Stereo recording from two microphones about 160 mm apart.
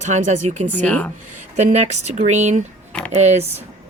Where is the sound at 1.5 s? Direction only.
45° right (ahead or behind).